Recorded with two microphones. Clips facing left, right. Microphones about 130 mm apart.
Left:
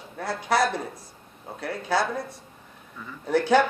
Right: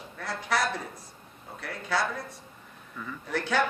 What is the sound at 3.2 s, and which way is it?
Speech, 35° left (ahead or behind).